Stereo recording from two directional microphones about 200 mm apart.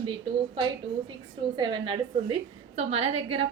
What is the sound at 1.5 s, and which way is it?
A woman's voice, 20° right (ahead or behind).